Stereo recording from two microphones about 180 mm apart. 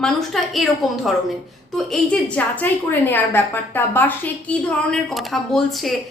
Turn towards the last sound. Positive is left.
turn(degrees=0)  # may be behind; listen again after turning